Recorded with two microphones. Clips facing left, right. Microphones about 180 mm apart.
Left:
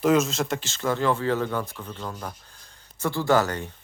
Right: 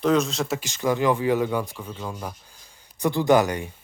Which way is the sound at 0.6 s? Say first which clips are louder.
Right 4 dB; 15° right (ahead or behind).